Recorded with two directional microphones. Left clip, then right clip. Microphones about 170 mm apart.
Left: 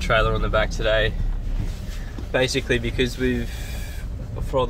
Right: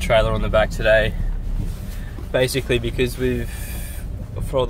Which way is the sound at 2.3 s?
10° right (ahead or behind).